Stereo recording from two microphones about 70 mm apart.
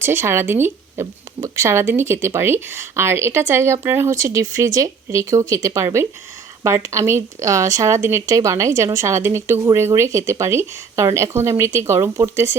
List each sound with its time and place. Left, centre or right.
0.0 s speech: right
4.1 s speech: right
8.3 s speech: right